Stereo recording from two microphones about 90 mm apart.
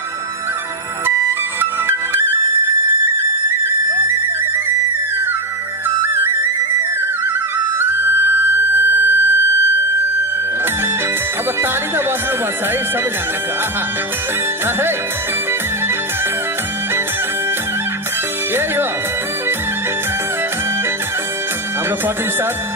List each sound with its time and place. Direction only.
1.6 s music: 25° right (ahead or behind)
5.9 s music: 25° right (ahead or behind)
7.8 s flute: 25° right (ahead or behind)